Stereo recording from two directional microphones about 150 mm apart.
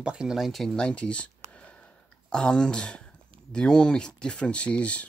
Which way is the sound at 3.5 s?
5° left (ahead or behind).